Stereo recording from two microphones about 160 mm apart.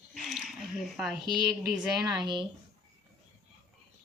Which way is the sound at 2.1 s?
30° right (ahead or behind).